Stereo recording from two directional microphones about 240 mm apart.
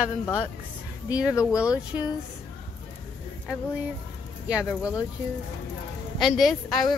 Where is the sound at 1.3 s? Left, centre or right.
Centre.